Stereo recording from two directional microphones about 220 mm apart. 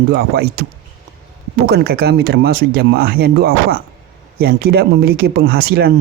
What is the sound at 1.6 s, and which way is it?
A man's voice, 45° right (ahead or behind).